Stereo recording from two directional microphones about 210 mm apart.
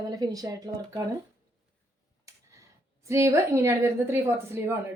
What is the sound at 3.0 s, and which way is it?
A woman's voice, 15° right (ahead or behind).